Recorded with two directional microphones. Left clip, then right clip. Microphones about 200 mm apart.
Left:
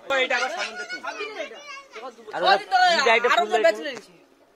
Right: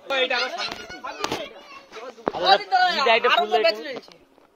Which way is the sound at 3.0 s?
5° left (ahead or behind).